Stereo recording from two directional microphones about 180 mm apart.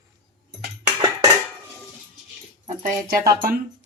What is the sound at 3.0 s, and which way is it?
Speech, 55° right (ahead or behind).